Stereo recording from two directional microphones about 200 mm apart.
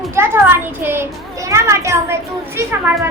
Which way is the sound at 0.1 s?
10° right (ahead or behind).